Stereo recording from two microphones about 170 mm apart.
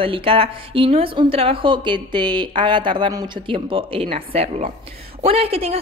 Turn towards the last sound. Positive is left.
turn(degrees=-35)  # may be behind; listen again after turning